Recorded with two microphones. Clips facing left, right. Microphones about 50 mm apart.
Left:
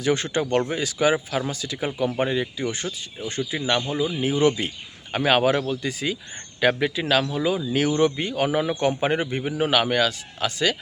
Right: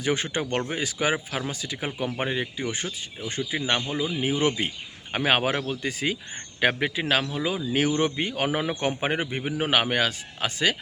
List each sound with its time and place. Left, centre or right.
0.0 s a man's voice: right